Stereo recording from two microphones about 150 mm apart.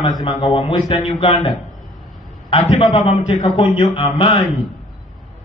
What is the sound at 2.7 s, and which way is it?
A man's voice, 35° left (ahead or behind).